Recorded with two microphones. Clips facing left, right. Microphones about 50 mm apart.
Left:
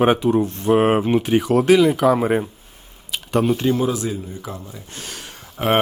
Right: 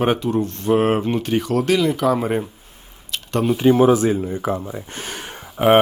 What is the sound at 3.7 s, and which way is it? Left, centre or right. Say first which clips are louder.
Speech: right 7 dB; right.